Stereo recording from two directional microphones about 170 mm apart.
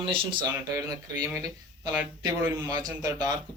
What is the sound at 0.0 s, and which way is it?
Speech, 30° right (ahead or behind).